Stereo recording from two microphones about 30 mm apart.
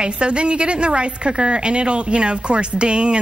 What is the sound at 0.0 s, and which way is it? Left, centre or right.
A woman's voice, right.